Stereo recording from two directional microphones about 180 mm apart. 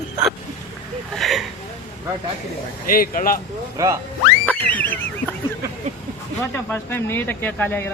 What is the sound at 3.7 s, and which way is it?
Speech, 20° right (ahead or behind).